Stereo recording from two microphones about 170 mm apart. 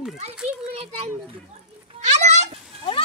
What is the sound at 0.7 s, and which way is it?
Speech, 35° right (ahead or behind).